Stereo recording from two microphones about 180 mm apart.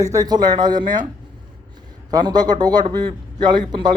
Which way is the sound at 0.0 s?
20° right (ahead or behind).